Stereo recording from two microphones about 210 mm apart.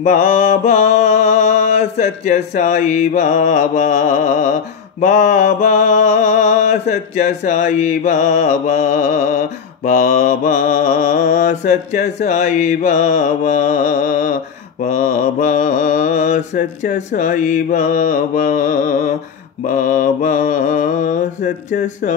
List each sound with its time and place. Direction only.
0.0 s mantra: 40° left (ahead or behind)